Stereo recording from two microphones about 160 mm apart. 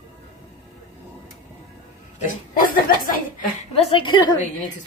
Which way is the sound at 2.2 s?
60° left (ahead or behind).